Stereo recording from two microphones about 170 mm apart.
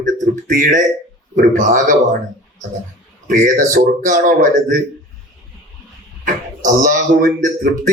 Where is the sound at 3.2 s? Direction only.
50° right (ahead or behind).